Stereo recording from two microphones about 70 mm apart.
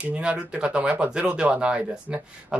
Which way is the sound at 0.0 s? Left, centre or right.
Centre.